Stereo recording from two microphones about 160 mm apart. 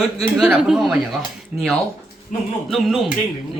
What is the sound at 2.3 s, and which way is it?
Speech, 50° left (ahead or behind).